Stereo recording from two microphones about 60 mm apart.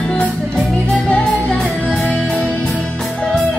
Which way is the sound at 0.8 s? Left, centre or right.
Left.